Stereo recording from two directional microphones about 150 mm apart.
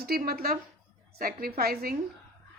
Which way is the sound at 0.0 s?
90° right.